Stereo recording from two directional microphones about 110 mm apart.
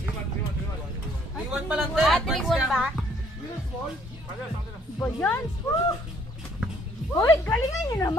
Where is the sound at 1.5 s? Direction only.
5° right (ahead or behind).